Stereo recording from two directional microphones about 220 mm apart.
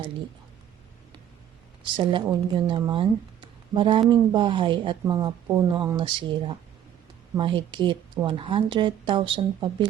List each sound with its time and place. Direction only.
1.8 s speech: 25° right (ahead or behind)